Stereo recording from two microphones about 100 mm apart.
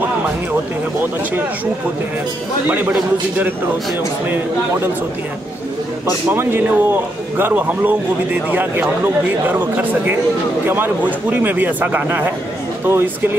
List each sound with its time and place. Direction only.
2.9 s speech: 15° right (ahead or behind)
6.3 s a man's voice: 20° right (ahead or behind)